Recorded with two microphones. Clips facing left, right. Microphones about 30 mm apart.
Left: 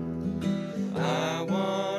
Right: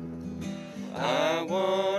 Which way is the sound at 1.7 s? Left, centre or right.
Centre.